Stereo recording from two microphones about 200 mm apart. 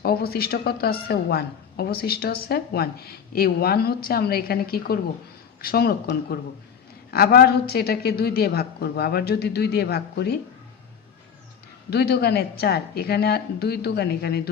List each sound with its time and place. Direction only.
0.0 s a woman's voice: 50° left (ahead or behind)
11.9 s a woman's voice: 55° left (ahead or behind)